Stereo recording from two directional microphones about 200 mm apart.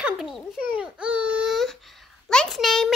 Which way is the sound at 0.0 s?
Centre (ahead or behind).